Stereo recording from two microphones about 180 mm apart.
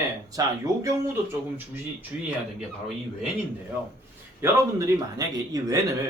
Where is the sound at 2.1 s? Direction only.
10° right (ahead or behind).